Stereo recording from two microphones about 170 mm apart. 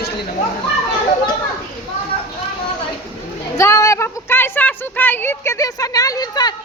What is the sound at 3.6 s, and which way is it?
A woman's voice, 15° left (ahead or behind).